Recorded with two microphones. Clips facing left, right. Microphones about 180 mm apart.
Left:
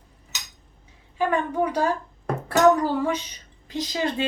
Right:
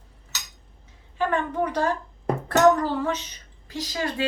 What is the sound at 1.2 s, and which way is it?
A woman's voice, 10° left (ahead or behind).